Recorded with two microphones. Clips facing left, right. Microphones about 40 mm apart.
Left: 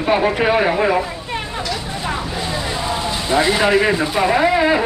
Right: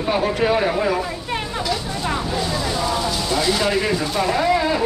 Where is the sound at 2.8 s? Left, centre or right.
Left.